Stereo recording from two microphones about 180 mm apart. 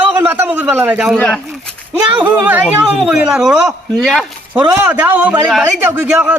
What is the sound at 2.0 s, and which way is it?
Speech, 5° right (ahead or behind).